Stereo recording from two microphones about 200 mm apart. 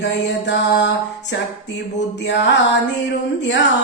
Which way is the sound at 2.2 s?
60° left (ahead or behind).